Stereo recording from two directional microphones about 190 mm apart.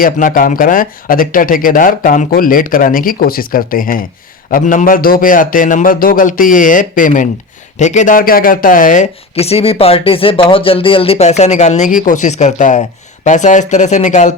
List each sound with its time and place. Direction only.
0.0 s speech: 45° left (ahead or behind)